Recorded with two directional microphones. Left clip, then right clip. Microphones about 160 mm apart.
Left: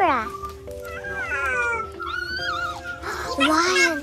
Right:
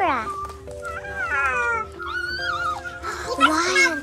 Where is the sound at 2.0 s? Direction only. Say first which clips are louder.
Right 1 dB; 55° right (ahead or behind).